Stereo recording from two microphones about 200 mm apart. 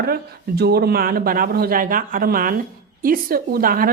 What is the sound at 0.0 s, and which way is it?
Speech, 50° right (ahead or behind).